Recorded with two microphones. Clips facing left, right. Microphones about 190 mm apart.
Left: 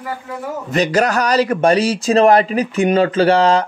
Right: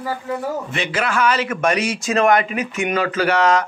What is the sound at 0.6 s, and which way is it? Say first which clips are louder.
Speech: left 7 dB; 40° left (ahead or behind).